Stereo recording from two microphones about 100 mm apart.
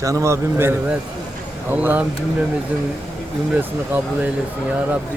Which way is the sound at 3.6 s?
15° right (ahead or behind).